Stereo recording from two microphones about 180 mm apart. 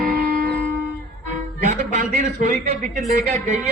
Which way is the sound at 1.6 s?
45° right (ahead or behind).